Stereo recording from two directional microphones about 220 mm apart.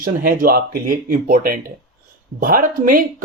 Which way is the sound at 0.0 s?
40° right (ahead or behind).